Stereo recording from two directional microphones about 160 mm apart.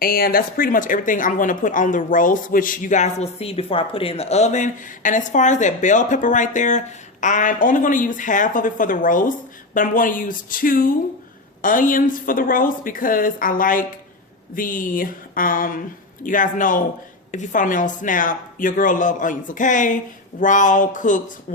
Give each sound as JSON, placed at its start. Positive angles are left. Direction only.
{"t": 0.0, "sound": "speech", "side_deg": 65}